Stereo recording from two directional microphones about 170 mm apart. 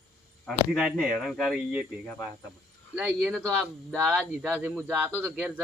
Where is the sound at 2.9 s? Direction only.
10° right (ahead or behind).